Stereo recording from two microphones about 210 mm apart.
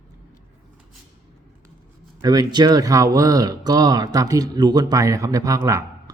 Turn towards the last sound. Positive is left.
turn(degrees=-15)  # may be behind; listen again after turning